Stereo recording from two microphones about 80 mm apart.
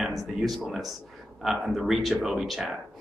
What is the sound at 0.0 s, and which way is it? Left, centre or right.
Speech, centre.